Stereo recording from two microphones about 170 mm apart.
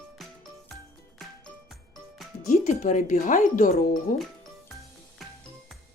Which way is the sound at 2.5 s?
45° left (ahead or behind).